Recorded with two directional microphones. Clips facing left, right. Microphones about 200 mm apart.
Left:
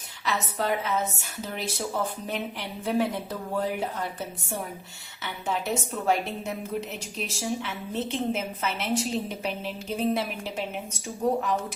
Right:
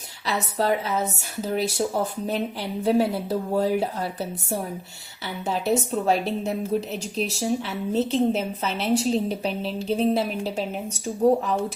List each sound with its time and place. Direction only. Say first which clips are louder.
0.6 s a woman's voice: right 4 dB; 35° right (ahead or behind)
5.5 s a woman's voice: right 6 dB; 35° right (ahead or behind)